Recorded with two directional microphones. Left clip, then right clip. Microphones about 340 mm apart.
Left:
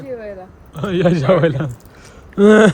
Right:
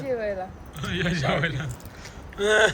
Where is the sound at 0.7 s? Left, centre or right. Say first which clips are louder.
Left 12 dB; centre.